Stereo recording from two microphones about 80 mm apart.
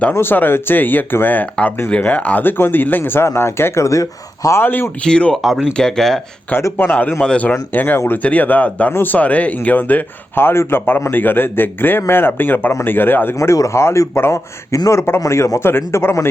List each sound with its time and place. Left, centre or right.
0.1 s speech: left
4.6 s speech: left
5.0 s speech: centre
5.4 s speech: centre
6.7 s speech: left
9.1 s a man's voice: centre